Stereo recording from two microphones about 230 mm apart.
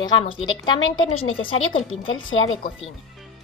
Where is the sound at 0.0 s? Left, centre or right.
Left.